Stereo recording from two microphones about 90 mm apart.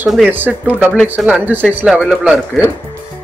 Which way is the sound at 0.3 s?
20° right (ahead or behind).